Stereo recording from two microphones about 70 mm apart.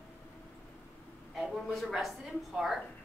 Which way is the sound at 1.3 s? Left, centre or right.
Centre.